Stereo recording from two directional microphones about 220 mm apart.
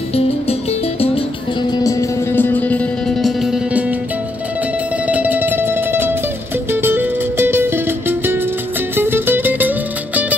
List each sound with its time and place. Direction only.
0.1 s music: 25° left (ahead or behind)
1.7 s music: 15° left (ahead or behind); by 3.8 s centre (ahead or behind)
5.0 s music: 5° right (ahead or behind)